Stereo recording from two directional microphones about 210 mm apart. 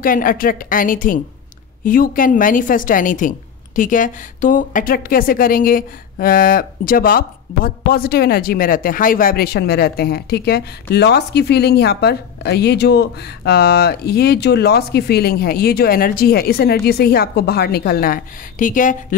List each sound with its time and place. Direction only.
0.0 s a woman's voice: 40° left (ahead or behind)